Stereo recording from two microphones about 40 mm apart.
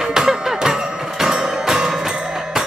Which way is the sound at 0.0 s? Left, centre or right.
Centre.